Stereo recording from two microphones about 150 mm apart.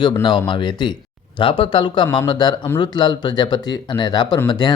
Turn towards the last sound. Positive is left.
turn(degrees=25)  # may be behind; listen again after turning